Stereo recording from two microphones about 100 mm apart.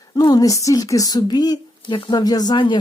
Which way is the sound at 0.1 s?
45° left (ahead or behind).